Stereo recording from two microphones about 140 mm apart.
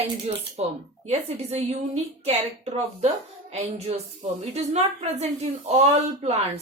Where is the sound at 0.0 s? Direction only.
50° right (ahead or behind).